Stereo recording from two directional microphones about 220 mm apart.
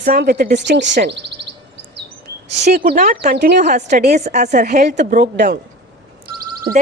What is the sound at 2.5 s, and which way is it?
Speech, 35° right (ahead or behind).